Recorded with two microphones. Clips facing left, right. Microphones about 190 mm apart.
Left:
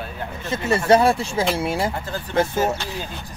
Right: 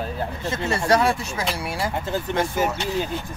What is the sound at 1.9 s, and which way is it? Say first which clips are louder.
Speech: left 1 dB; 20° right (ahead or behind).